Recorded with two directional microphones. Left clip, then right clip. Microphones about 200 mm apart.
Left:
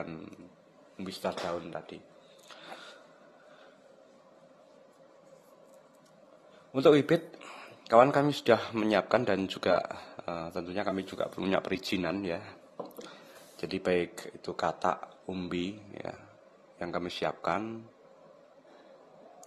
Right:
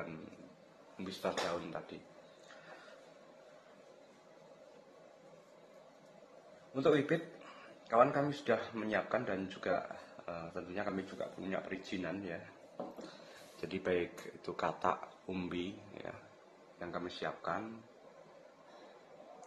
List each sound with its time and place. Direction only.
0.9 s speech: 25° left (ahead or behind)
6.7 s speech: 35° left (ahead or behind)
11.1 s speech: 45° left (ahead or behind)
13.6 s speech: 25° left (ahead or behind)
15.5 s speech: 25° left (ahead or behind)